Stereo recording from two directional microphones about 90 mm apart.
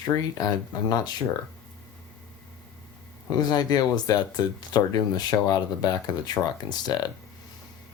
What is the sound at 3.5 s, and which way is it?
Speech, 45° left (ahead or behind).